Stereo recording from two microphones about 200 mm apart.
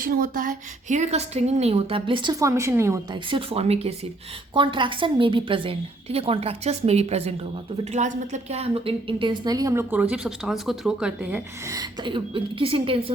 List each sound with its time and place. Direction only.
0.0 s a woman's voice: 45° right (ahead or behind); by 3.2 s 15° right (ahead or behind)
3.2 s a woman's voice: 30° right (ahead or behind)